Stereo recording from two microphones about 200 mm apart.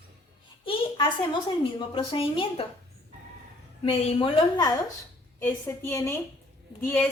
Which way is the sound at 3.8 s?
25° left (ahead or behind).